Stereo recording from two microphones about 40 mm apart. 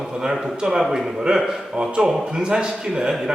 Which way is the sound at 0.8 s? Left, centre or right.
Centre.